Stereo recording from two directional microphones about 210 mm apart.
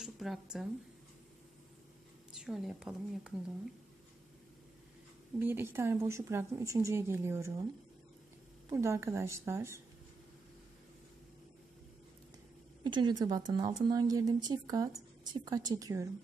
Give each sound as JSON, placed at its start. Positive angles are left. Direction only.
{"t": 0.0, "sound": "speech", "side_deg": 0}
{"t": 2.3, "sound": "a woman's voice", "side_deg": 0}
{"t": 5.4, "sound": "speech", "side_deg": -10}
{"t": 8.6, "sound": "speech", "side_deg": -15}
{"t": 12.8, "sound": "speech", "side_deg": -20}